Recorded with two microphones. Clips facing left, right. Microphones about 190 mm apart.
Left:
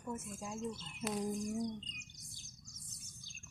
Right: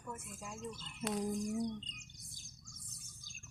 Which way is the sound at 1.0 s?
5° left (ahead or behind).